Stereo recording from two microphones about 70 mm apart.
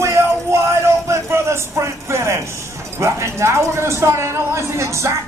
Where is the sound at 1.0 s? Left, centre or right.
Right.